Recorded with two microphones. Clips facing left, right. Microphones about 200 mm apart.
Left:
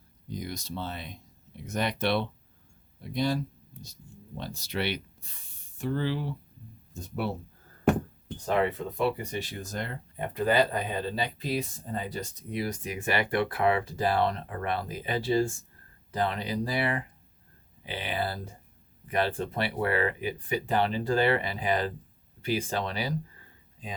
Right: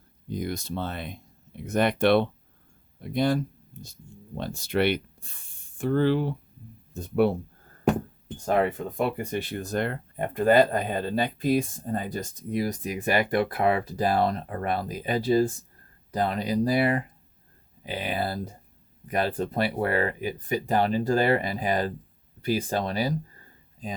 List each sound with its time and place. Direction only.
0.3 s speech: 55° right (ahead or behind)
8.4 s speech: 45° right (ahead or behind)